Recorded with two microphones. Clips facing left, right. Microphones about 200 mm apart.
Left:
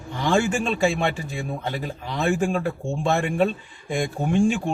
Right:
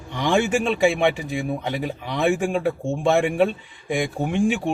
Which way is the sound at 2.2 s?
15° right (ahead or behind).